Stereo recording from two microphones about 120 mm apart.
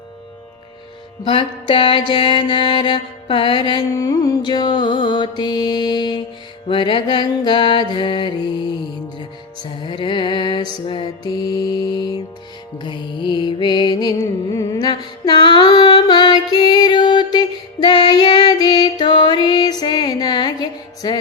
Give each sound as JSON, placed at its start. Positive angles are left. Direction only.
{"t": 1.2, "sound": "music", "side_deg": 45}
{"t": 10.0, "sound": "music", "side_deg": 40}